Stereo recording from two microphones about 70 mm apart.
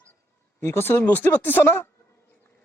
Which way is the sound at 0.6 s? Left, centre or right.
Left.